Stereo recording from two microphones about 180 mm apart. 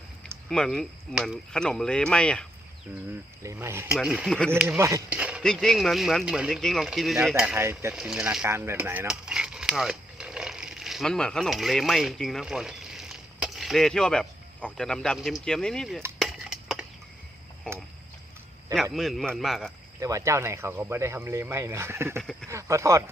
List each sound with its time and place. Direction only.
0.5 s speech: 5° left (ahead or behind)
3.4 s speech: 15° right (ahead or behind); by 4.5 s 5° left (ahead or behind)
4.5 s speech: 10° right (ahead or behind)
5.0 s a sound: 5° right (ahead or behind)
5.4 s speech: 5° left (ahead or behind); by 7.9 s 15° right (ahead or behind)
7.9 s mechanisms: 5° right (ahead or behind)
16.1 s dishes: centre (ahead or behind)
18.7 s speech: centre (ahead or behind)
20.0 s speech: 15° right (ahead or behind)
22.2 s speech: 5° left (ahead or behind)
22.4 s speech: 15° right (ahead or behind)